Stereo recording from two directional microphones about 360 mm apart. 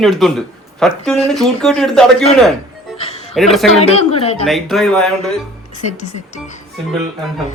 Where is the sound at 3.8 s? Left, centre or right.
Centre.